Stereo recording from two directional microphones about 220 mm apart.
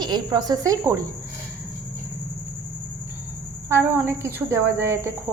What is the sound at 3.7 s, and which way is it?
Speech, 10° right (ahead or behind).